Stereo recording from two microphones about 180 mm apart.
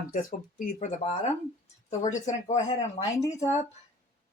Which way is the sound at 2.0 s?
40° left (ahead or behind).